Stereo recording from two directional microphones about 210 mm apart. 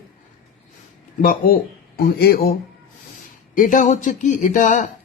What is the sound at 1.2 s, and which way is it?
Speech, 45° left (ahead or behind).